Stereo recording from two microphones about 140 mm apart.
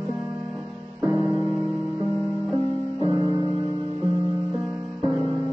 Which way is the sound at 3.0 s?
45° right (ahead or behind).